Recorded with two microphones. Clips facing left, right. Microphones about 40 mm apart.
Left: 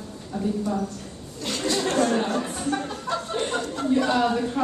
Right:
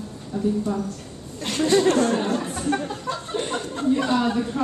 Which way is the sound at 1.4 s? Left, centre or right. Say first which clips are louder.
Right 6 dB; right.